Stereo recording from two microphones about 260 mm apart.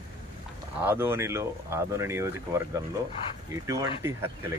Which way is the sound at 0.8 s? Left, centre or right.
Centre.